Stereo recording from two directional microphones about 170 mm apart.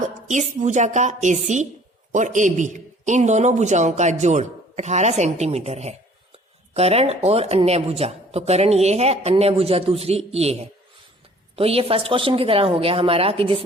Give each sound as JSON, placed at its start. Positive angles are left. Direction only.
{"t": 0.0, "sound": "a woman's voice", "side_deg": -45}